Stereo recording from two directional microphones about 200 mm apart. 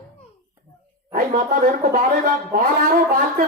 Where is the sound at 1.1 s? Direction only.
45° right (ahead or behind).